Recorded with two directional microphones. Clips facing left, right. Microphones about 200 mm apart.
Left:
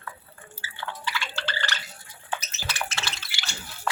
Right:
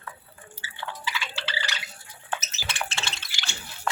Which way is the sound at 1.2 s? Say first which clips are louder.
Left 1 dB; 5° right (ahead or behind).